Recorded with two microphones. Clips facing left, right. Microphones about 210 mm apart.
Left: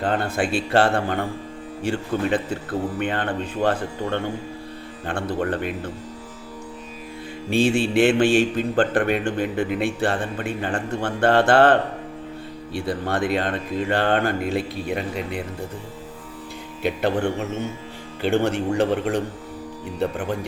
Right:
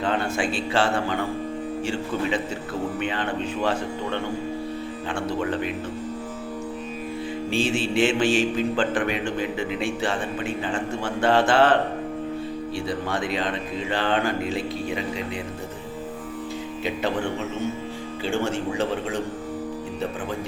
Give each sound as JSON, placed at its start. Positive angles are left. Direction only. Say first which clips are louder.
{"t": 0.0, "sound": "a man's voice", "louder": "left 2 dB", "side_deg": 55}
{"t": 7.5, "sound": "a man's voice", "louder": "left 5 dB", "side_deg": 60}
{"t": 18.2, "sound": "a man's voice", "louder": "left 5 dB", "side_deg": 65}